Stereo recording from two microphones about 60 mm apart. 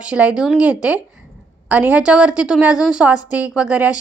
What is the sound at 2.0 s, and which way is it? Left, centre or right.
A woman's voice, centre.